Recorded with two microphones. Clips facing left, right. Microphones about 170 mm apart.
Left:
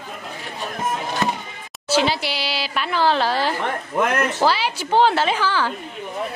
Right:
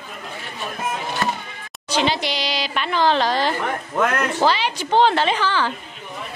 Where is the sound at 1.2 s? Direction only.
20° left (ahead or behind).